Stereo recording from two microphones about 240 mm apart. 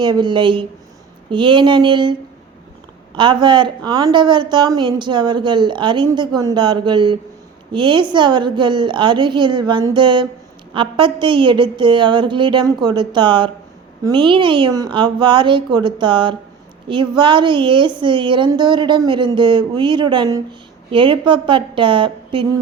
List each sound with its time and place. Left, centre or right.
0.0 s a woman's voice: centre
3.2 s a woman's voice: centre